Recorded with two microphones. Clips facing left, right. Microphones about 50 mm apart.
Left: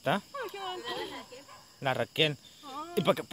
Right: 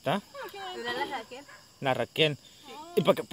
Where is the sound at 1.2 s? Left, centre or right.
Right.